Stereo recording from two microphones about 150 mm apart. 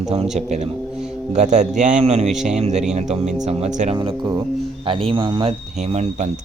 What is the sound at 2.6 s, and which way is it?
Speech, 45° right (ahead or behind).